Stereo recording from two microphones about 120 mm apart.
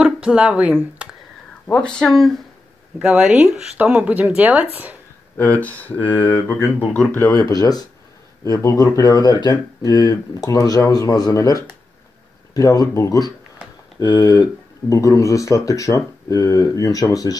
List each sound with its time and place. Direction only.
0.0 s speech: 10° right (ahead or behind)
1.7 s speech: 5° left (ahead or behind); by 4.6 s 10° right (ahead or behind)
5.4 s speech: 15° left (ahead or behind)
7.2 s speech: 30° left (ahead or behind)